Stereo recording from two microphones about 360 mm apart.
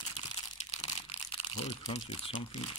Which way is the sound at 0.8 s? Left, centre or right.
Centre.